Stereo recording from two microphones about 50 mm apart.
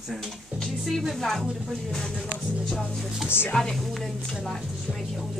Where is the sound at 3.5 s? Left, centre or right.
Centre.